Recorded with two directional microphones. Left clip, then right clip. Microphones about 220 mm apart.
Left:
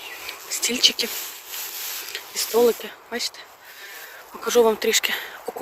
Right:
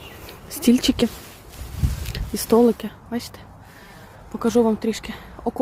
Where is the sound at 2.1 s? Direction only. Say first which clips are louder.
Right 3 dB; 20° right (ahead or behind).